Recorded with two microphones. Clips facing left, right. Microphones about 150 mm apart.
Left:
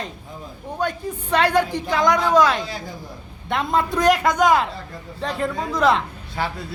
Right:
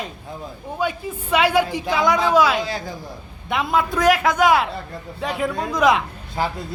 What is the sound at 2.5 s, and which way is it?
Speech, 90° right.